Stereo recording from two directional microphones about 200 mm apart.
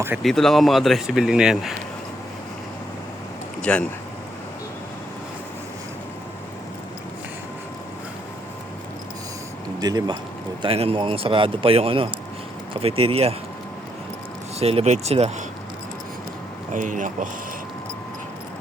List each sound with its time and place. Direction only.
0.2 s speech: centre (ahead or behind)
3.6 s speech: 5° left (ahead or behind)
9.8 s speech: 20° right (ahead or behind)
14.6 s speech: 30° right (ahead or behind)
16.7 s speech: 40° right (ahead or behind)